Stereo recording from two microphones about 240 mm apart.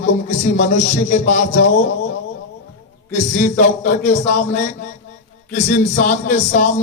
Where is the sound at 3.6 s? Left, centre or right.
Left.